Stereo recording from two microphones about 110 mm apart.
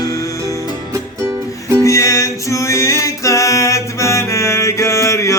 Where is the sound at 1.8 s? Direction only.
30° left (ahead or behind).